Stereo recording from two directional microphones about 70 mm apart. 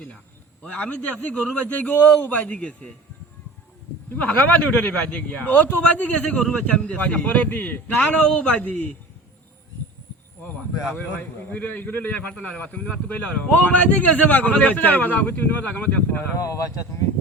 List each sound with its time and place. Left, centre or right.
0.6 s a man's voice: centre
4.1 s speech: centre
11.4 s speech: left
16.4 s speech: left